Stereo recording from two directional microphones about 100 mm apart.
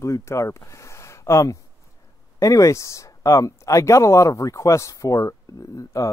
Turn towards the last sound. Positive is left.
turn(degrees=30)  # may be behind; listen again after turning